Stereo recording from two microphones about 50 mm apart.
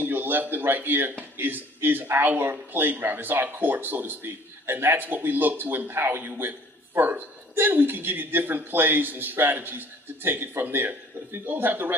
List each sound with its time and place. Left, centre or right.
0.0 s speech: right